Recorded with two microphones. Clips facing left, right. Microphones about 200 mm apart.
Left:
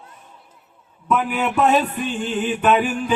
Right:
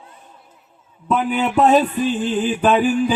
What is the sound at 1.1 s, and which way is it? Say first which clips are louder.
Mantra: right 1 dB; 30° right (ahead or behind).